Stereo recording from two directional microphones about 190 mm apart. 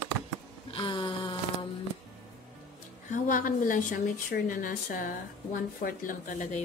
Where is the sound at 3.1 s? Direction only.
45° left (ahead or behind).